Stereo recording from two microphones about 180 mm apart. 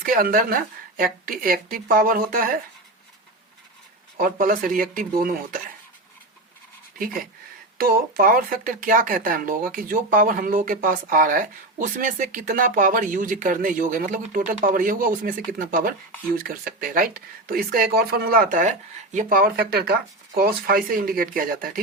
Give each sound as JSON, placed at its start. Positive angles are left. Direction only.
{"t": 0.0, "sound": "a woman's voice", "side_deg": -50}
{"t": 4.2, "sound": "speech", "side_deg": -50}
{"t": 7.8, "sound": "speech", "side_deg": -55}